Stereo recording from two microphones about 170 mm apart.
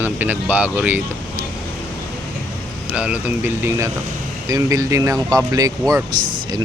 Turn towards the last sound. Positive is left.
turn(degrees=-20)  # may be behind; listen again after turning